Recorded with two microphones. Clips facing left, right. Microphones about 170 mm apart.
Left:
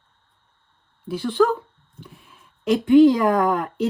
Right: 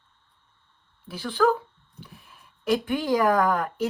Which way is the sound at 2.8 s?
25° left (ahead or behind).